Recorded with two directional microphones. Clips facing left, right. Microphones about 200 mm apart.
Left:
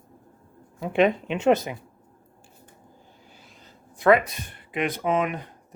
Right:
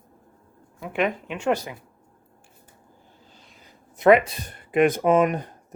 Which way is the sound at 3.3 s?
5° left (ahead or behind).